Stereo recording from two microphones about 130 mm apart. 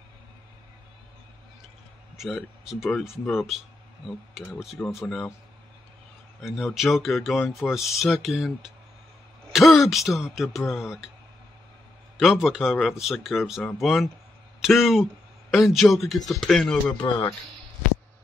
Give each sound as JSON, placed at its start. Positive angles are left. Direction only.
{"t": 2.1, "sound": "speech", "side_deg": 0}
{"t": 6.4, "sound": "speech", "side_deg": 0}
{"t": 9.8, "sound": "speech", "side_deg": 0}
{"t": 12.2, "sound": "speech", "side_deg": 0}
{"t": 17.0, "sound": "speech", "side_deg": 30}